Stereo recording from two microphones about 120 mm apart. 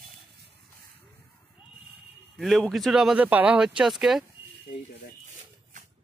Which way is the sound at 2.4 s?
Centre (ahead or behind).